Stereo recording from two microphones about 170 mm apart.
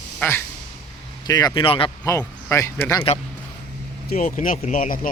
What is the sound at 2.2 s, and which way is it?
Speech, 15° left (ahead or behind).